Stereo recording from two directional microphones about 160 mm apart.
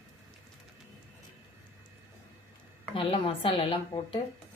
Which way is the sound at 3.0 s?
35° left (ahead or behind).